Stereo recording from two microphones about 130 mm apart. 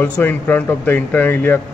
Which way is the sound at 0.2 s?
15° left (ahead or behind).